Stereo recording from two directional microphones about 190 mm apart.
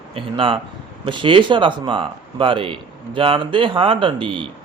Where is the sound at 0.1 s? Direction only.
30° right (ahead or behind).